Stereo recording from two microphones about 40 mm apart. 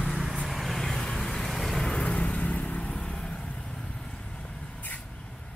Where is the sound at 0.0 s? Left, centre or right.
Centre.